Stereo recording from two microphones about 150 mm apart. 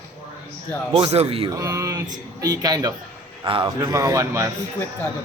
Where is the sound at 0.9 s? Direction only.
40° right (ahead or behind).